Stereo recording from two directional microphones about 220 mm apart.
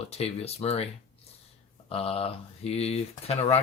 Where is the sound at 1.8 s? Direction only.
25° left (ahead or behind).